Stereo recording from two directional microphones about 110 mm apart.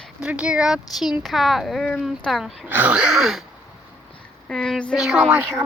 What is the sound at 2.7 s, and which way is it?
Speech, 15° right (ahead or behind).